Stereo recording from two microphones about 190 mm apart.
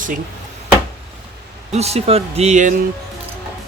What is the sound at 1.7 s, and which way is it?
Speech, 35° right (ahead or behind).